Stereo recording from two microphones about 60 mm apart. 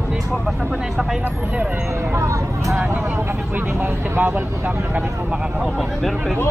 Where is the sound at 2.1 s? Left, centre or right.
Right.